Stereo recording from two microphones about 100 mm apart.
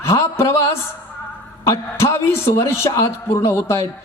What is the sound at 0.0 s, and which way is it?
Speech, 25° left (ahead or behind).